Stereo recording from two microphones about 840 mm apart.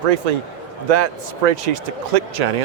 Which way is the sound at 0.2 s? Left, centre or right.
Right.